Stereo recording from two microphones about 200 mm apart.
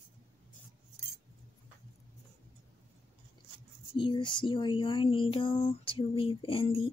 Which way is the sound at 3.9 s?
25° left (ahead or behind).